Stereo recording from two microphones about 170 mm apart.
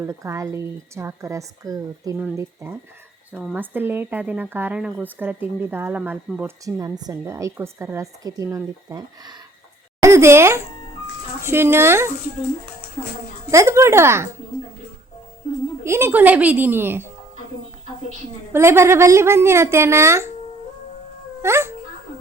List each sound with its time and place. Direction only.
0.0 s speech: 15° right (ahead or behind)
6.7 s speech: 20° right (ahead or behind)
13.5 s speech: 15° right (ahead or behind)
15.8 s speech: 15° right (ahead or behind)
18.5 s speech: 15° right (ahead or behind)
21.4 s speech: 15° right (ahead or behind)